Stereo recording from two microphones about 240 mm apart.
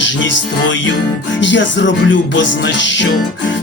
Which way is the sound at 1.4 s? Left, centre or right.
Left.